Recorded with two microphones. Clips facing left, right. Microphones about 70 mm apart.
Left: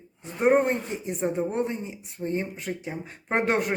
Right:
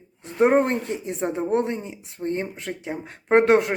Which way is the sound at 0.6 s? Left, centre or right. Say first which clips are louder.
Right 3 dB; right.